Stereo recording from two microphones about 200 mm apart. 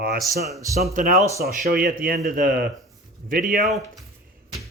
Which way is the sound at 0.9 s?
35° right (ahead or behind).